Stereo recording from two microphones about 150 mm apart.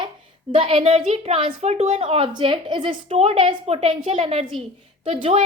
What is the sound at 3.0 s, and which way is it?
A woman's voice, 45° right (ahead or behind).